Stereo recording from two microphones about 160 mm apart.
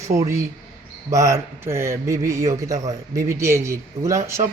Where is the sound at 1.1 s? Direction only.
20° right (ahead or behind).